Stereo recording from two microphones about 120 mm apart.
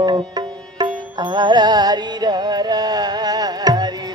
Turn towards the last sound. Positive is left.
turn(degrees=-35)  # may be behind; listen again after turning